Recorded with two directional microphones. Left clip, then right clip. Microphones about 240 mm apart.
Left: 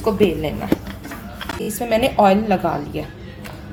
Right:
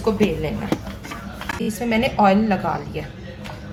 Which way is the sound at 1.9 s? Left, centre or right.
Left.